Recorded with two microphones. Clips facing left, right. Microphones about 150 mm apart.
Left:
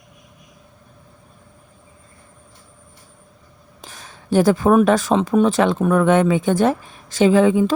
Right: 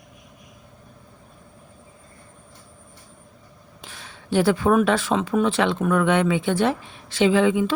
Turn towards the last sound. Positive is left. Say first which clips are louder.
# left 4 dB
turn(degrees=40)  # may be behind; listen again after turning